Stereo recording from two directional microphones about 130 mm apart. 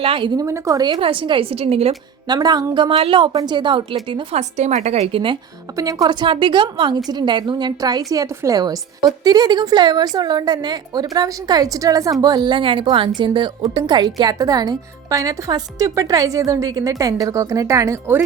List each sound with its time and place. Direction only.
0.0 s a woman's voice: 40° right (ahead or behind)
0.3 s speech: 25° right (ahead or behind)
0.9 s a woman's voice: 40° right (ahead or behind)
2.2 s a woman's voice: 30° right (ahead or behind)
4.4 s a woman's voice: 60° right (ahead or behind); by 5.4 s 45° right (ahead or behind)
5.7 s a woman's voice: 25° right (ahead or behind)